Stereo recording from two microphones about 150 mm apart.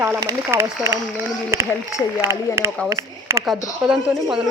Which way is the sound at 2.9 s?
20° right (ahead or behind).